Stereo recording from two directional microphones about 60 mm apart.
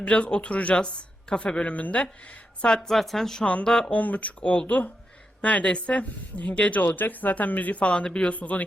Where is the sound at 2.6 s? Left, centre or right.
Centre.